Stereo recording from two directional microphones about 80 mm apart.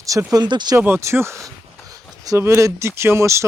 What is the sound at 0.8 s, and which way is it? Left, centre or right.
Speech, right.